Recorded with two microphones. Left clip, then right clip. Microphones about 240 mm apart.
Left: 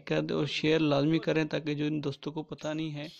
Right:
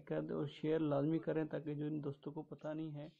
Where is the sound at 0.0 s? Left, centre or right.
Left.